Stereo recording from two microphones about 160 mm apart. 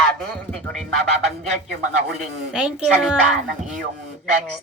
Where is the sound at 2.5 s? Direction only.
5° right (ahead or behind).